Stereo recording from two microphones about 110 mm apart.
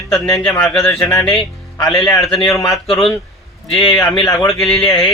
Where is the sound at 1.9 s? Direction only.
5° left (ahead or behind).